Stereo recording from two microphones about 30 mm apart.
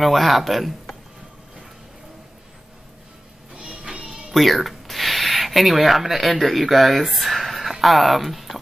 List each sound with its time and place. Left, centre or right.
0.0 s speech: centre
3.5 s music: right
4.3 s speech: centre